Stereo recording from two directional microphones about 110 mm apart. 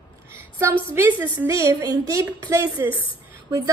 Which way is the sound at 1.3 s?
30° right (ahead or behind).